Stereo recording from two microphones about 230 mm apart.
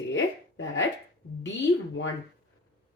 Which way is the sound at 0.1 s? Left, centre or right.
Left.